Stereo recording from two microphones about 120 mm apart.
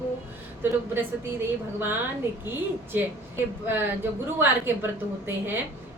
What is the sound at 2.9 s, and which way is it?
A woman's voice, 15° right (ahead or behind).